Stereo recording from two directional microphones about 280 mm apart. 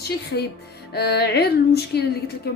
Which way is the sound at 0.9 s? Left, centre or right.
Left.